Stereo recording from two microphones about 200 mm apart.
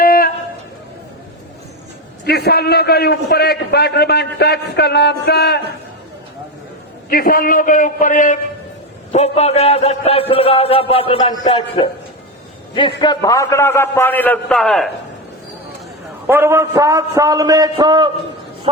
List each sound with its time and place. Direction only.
0.0 s a sound: 45° left (ahead or behind)
2.2 s a man's voice: 55° left (ahead or behind)
7.1 s a man's voice: 45° left (ahead or behind); by 11.9 s 25° left (ahead or behind)
13.0 s a man's voice: 20° left (ahead or behind); by 14.8 s centre (ahead or behind)
16.2 s a man's voice: 10° right (ahead or behind)